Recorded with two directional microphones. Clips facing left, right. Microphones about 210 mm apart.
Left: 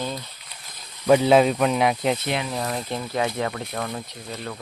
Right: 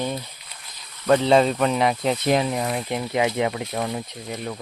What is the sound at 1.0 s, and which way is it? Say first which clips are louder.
Speech: left 1 dB; 10° left (ahead or behind).